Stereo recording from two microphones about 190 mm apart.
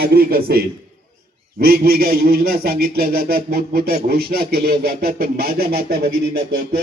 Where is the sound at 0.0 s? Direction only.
55° right (ahead or behind).